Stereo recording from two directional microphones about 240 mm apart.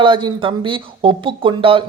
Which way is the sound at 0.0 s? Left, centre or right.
Centre.